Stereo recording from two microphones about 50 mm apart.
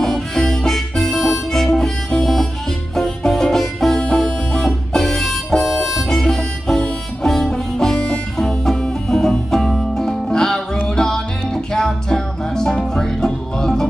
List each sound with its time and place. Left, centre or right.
0.0 s harmonica: centre
3.0 s music: centre
4.0 s harmonica: centre
11.0 s music: centre